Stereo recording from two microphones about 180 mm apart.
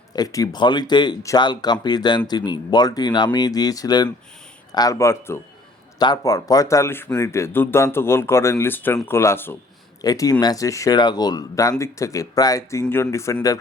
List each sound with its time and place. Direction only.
0.2 s speech: 20° left (ahead or behind)